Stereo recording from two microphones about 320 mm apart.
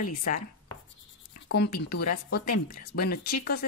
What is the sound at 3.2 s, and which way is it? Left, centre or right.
Speech, left.